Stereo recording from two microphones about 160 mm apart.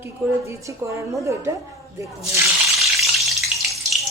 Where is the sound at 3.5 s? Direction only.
5° right (ahead or behind).